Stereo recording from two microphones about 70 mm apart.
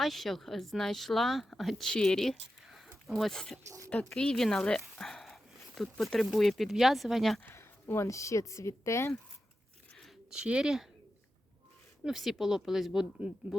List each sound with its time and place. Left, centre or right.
0.0 s speech: centre
2.6 s a sound: centre
3.1 s speech: centre
7.4 s speech: left
10.3 s speech: centre
12.0 s speech: centre